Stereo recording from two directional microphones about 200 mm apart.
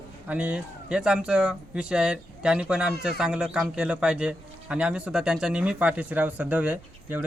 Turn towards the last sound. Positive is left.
turn(degrees=-10)  # may be behind; listen again after turning